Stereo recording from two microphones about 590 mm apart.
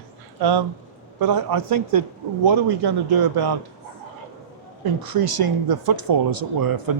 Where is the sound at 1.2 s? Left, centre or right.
Right.